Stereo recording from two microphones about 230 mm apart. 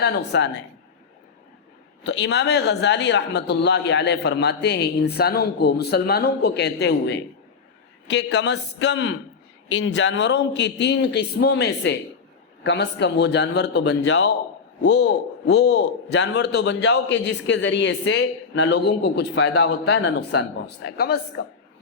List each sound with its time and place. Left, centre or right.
0.0 s speech: left
2.0 s speech: left